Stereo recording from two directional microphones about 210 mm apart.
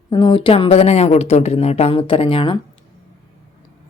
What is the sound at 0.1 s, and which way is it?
A woman's voice, 20° left (ahead or behind).